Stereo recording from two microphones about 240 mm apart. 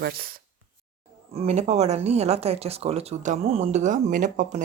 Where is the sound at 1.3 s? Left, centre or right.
Right.